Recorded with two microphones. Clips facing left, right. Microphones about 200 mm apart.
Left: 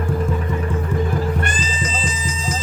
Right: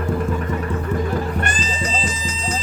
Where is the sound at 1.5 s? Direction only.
40° right (ahead or behind).